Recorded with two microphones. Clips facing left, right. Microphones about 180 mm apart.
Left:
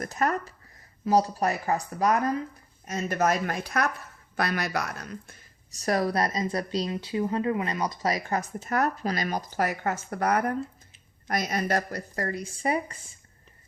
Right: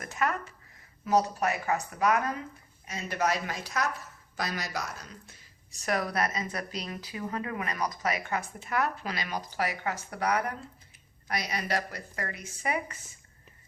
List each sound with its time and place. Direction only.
0.0 s speech: 40° left (ahead or behind)
2.8 s a woman's voice: 45° left (ahead or behind)
5.7 s speech: 35° left (ahead or behind)